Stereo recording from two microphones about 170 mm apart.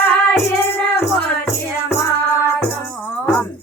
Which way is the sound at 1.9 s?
15° left (ahead or behind).